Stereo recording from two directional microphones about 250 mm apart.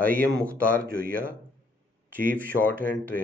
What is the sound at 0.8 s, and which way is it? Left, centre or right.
Speech, right.